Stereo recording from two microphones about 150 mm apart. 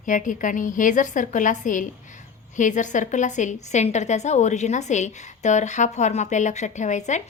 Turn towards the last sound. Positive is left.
turn(degrees=50)  # may be behind; listen again after turning